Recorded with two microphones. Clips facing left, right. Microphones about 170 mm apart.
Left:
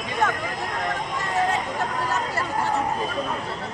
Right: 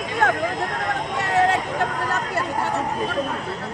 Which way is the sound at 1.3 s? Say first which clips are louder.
Right 4 dB; 70° right (ahead or behind).